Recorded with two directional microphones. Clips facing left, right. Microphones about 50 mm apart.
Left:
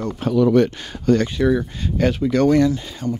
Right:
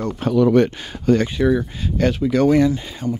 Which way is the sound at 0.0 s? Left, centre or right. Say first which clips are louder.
Right 1 dB; right.